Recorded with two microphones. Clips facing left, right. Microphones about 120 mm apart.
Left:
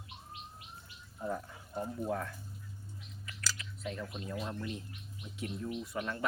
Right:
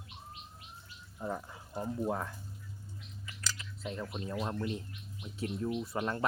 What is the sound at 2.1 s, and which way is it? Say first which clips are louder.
Speech: right 1 dB; 25° right (ahead or behind).